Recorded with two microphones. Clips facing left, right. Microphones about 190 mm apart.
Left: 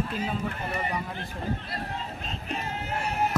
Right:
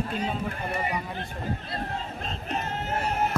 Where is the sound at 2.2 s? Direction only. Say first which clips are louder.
Right 3 dB; 40° right (ahead or behind).